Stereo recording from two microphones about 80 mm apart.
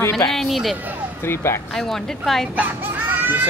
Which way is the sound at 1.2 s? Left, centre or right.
Left.